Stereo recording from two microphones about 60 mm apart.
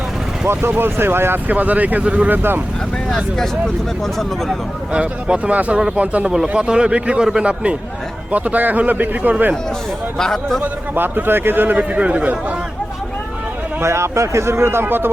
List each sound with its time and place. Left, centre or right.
0.4 s a man's voice: right
1.5 s a man's voice: right
3.3 s speech: centre
4.9 s a man's voice: centre
6.2 s a man's voice: centre; by 9.3 s right
10.2 s speech: centre
10.6 s a man's voice: right
11.8 s a man's voice: right
13.8 s a man's voice: right